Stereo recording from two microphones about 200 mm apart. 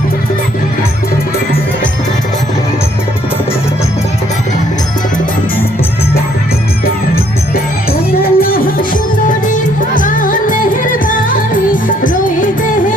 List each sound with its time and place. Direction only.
8.2 s music: 45° left (ahead or behind)